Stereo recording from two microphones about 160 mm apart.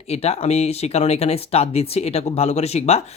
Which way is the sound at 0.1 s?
40° left (ahead or behind).